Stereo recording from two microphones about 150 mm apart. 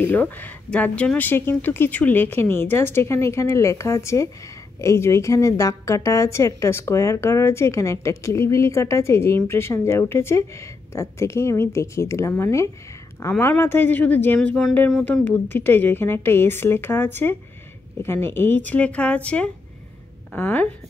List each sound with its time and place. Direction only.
0.0 s a woman's voice: 15° left (ahead or behind)